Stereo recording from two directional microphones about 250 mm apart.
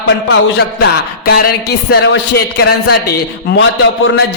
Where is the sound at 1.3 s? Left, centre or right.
Left.